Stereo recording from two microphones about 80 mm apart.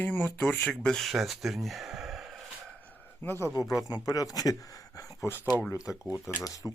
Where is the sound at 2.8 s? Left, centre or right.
Left.